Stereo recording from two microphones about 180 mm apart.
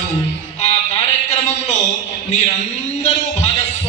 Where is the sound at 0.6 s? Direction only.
40° left (ahead or behind).